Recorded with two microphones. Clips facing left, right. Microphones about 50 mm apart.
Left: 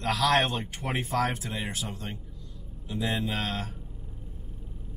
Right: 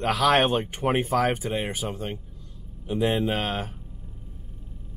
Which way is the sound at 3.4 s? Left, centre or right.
Right.